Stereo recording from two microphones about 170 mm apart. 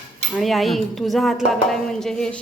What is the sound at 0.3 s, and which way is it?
A woman's voice, centre (ahead or behind).